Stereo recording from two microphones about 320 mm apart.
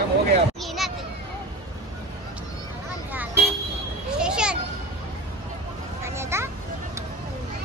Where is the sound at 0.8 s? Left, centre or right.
Centre.